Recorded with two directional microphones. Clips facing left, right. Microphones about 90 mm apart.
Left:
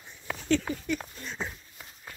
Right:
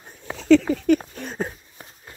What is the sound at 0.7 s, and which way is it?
Speech, 65° right (ahead or behind).